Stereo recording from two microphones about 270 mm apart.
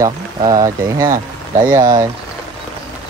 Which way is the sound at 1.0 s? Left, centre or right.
Right.